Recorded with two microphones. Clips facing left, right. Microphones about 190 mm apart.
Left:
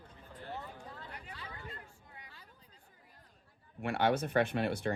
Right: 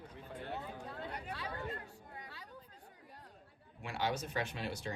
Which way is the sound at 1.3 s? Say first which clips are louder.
Right 6 dB; 65° right (ahead or behind).